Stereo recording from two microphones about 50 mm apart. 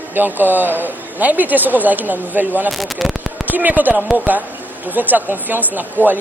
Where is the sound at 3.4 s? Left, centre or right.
Right.